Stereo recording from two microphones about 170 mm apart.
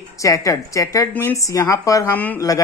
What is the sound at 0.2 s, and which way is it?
A woman's voice, 20° left (ahead or behind).